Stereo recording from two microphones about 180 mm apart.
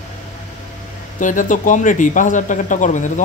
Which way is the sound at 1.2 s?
45° left (ahead or behind).